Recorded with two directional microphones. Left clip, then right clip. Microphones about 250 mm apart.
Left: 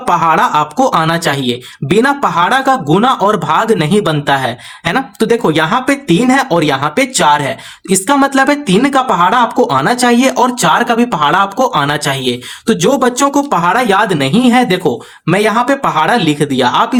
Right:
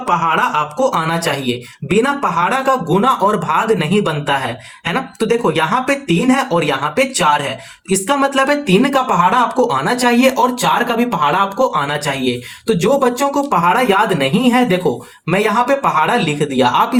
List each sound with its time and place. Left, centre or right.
0.0 s speech: left